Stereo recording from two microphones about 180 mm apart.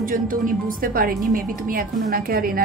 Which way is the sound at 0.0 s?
50° right (ahead or behind).